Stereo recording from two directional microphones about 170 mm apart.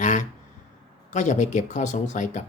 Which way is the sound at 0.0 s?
45° left (ahead or behind).